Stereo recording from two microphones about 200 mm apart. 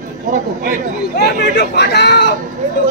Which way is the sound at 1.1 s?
55° left (ahead or behind).